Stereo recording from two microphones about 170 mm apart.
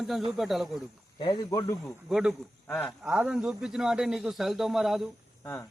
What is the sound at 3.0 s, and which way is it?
Speech, 5° right (ahead or behind).